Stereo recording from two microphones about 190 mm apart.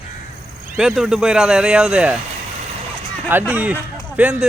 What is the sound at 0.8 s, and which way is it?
A man's voice, 5° right (ahead or behind).